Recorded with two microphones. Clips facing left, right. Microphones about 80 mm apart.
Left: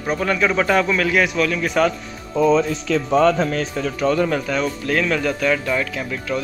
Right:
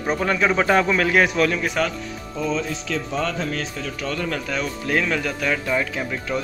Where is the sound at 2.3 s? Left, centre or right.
Left.